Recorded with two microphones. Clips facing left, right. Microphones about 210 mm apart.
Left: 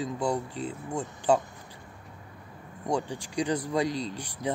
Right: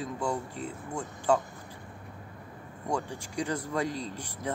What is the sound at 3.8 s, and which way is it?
Speech, 85° left.